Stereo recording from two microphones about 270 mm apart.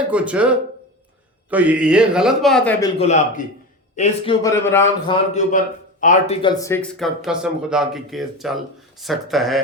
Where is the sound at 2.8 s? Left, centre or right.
Left.